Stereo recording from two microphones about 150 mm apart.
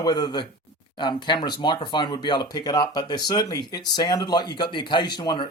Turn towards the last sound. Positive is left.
turn(degrees=30)  # may be behind; listen again after turning